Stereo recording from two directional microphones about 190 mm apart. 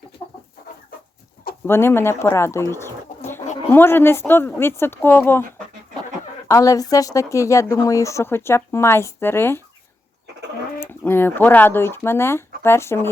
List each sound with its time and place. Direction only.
1.6 s speech: 10° left (ahead or behind)
10.8 s speech: 10° left (ahead or behind)